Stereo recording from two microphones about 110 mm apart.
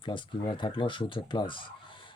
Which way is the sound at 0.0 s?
50° left (ahead or behind).